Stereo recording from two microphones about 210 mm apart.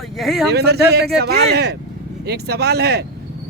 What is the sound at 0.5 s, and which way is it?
Speech, 50° right (ahead or behind).